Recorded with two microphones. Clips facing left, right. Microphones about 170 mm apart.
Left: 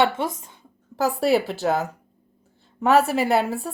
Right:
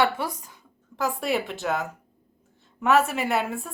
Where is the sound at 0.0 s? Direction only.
25° left (ahead or behind).